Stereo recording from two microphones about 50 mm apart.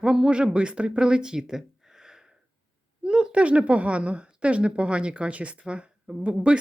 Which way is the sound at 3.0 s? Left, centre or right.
Right.